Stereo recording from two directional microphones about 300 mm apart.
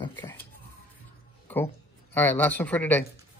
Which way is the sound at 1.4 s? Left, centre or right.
Centre.